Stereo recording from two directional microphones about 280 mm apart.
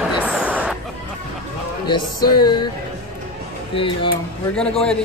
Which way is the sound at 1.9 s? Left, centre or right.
Centre.